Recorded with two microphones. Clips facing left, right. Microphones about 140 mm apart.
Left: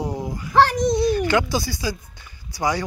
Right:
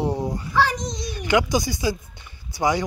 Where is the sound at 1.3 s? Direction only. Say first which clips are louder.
Right 1 dB; 15° right (ahead or behind).